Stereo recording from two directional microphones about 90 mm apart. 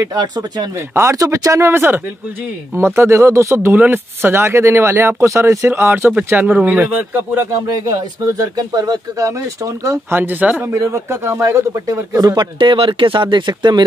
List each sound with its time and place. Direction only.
0.1 s speech: 55° right (ahead or behind)
0.9 s speech: 35° right (ahead or behind)
3.7 s speech: 20° right (ahead or behind)
7.5 s speech: 40° right (ahead or behind)
10.1 s speech: 20° right (ahead or behind)
10.7 s speech: 35° right (ahead or behind)
12.2 s speech: 45° right (ahead or behind)
12.5 s speech: 70° right (ahead or behind); by 13.8 s 55° right (ahead or behind)